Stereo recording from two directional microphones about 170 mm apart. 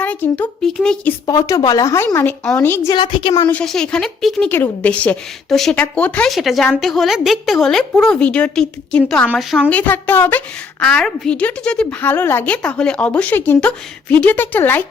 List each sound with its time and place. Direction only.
0.0 s a woman's voice: 10° left (ahead or behind)
1.3 s a woman's voice: 20° left (ahead or behind)
2.9 s a woman's voice: 30° left (ahead or behind)
3.5 s a woman's voice: 5° left (ahead or behind)